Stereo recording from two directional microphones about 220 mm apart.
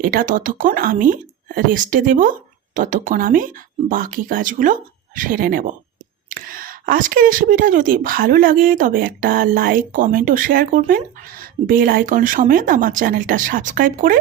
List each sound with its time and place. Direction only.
0.0 s speech: 40° right (ahead or behind)